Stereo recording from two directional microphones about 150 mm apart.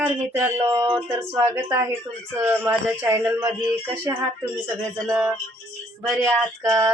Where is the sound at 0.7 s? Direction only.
40° right (ahead or behind).